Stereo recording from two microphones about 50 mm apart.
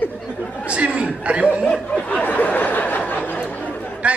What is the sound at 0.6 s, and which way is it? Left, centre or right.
A man's voice, right.